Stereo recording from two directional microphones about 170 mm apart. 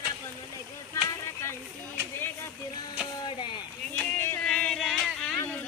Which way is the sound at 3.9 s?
10° left (ahead or behind).